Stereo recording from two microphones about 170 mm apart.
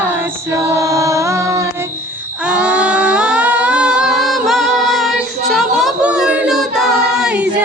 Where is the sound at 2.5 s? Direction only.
5° right (ahead or behind).